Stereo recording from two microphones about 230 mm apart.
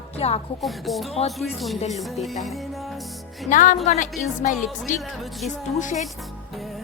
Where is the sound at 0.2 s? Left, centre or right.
Left.